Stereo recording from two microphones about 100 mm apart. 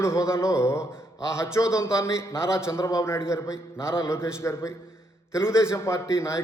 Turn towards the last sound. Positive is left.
turn(degrees=30)  # may be behind; listen again after turning